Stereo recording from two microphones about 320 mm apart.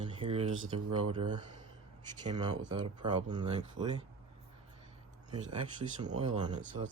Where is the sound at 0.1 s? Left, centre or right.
Centre.